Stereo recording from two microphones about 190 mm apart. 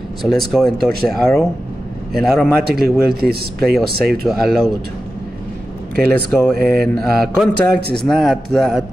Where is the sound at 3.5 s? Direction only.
Centre (ahead or behind).